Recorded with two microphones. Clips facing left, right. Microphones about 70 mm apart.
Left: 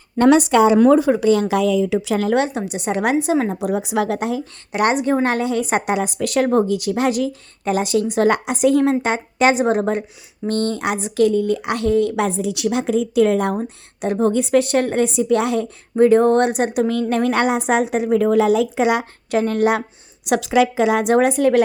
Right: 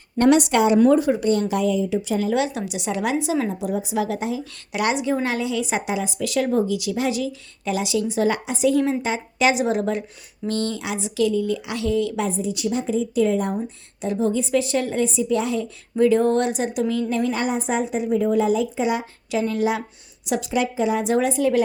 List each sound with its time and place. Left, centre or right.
1.4 s speech: left
2.3 s a woman's voice: left
3.6 s a woman's voice: left
4.7 s a woman's voice: left
12.1 s a woman's voice: left
16.0 s a woman's voice: left
19.3 s a woman's voice: left
20.2 s a woman's voice: left